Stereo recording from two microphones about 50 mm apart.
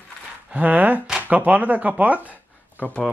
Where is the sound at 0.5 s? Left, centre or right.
Right.